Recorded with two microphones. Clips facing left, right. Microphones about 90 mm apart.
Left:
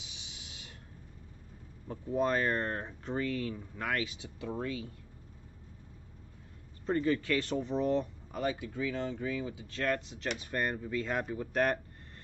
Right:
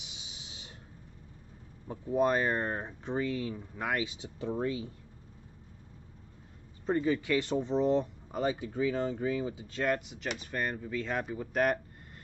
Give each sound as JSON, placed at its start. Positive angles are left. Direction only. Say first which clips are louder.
{"t": 0.0, "sound": "a sound", "louder": "right 1 dB", "side_deg": -20}
{"t": 1.9, "sound": "speech", "louder": "right 3 dB", "side_deg": -10}
{"t": 6.9, "sound": "speech", "louder": "right 1 dB", "side_deg": -10}
{"t": 9.8, "sound": "speech", "louder": "right 1 dB", "side_deg": -10}